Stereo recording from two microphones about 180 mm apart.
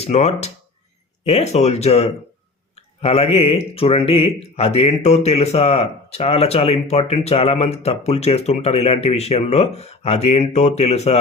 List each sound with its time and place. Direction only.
0.0 s speech: 35° left (ahead or behind)